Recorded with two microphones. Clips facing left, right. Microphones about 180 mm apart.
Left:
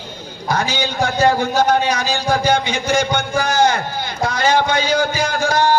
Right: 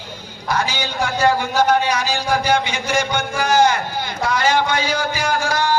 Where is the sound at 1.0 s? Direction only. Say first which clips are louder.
Left 2 dB; 30° left (ahead or behind).